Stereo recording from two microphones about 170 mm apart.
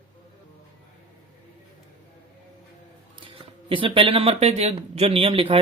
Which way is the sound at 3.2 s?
30° right (ahead or behind).